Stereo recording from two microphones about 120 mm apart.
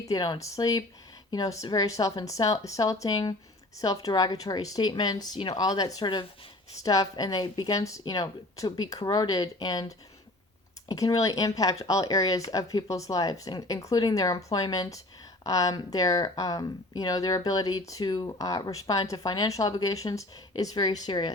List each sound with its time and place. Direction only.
0.0 s speech: 35° left (ahead or behind)